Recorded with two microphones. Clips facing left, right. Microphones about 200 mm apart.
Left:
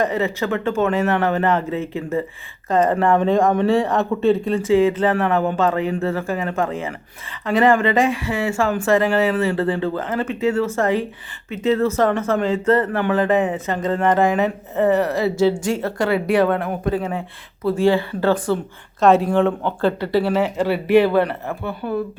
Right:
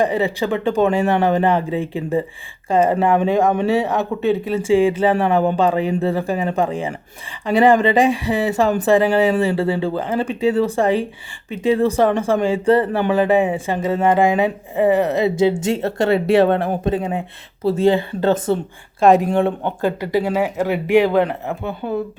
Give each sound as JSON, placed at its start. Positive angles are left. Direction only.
{"t": 0.0, "sound": "speech", "side_deg": -15}